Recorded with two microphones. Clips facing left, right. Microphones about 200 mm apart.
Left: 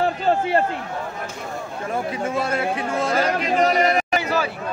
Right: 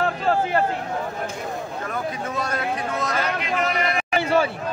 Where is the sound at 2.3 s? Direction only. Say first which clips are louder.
Left 4 dB; 30° left (ahead or behind).